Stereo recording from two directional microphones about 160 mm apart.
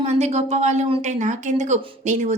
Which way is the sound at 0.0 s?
45° right (ahead or behind).